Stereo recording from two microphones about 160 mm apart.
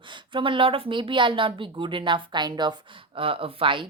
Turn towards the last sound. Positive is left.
turn(degrees=-30)  # may be behind; listen again after turning